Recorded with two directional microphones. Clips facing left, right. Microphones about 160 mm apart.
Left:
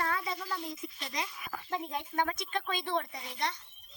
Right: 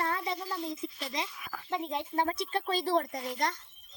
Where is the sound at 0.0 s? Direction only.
30° right (ahead or behind).